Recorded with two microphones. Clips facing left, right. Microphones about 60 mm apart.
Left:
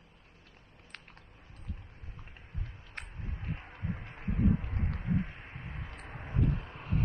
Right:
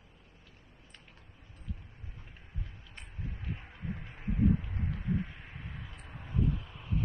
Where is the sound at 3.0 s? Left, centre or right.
Left.